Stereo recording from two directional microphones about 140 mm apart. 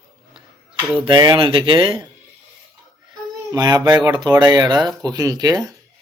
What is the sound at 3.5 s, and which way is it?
Speech, 30° right (ahead or behind).